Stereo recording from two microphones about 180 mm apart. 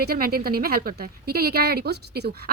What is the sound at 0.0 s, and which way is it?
Speech, 55° right (ahead or behind).